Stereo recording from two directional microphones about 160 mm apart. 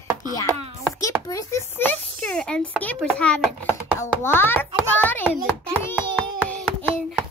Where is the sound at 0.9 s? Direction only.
20° left (ahead or behind).